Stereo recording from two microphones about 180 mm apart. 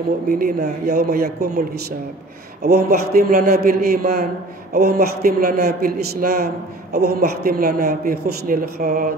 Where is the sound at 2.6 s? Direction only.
60° right (ahead or behind).